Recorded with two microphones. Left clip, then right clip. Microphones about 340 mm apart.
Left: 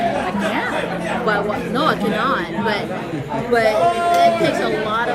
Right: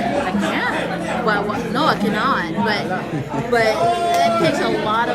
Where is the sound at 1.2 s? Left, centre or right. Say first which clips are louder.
Even; centre.